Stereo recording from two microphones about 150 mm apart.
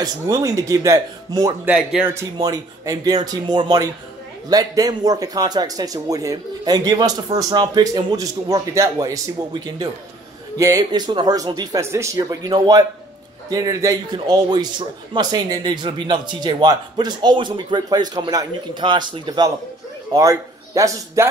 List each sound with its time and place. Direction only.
0.0 s a man's voice: 20° right (ahead or behind)
1.7 s speech: 10° right (ahead or behind)
2.3 s a man's voice: 25° right (ahead or behind)